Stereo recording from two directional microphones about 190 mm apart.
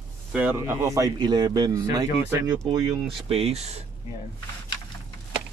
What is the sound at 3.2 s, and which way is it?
Speech, 30° right (ahead or behind).